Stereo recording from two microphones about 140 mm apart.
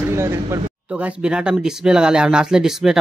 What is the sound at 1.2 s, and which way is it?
Speech, 5° right (ahead or behind).